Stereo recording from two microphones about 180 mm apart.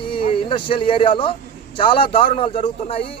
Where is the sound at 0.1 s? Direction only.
25° left (ahead or behind).